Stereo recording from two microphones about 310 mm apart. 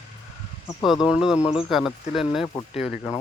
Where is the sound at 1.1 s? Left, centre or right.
Centre.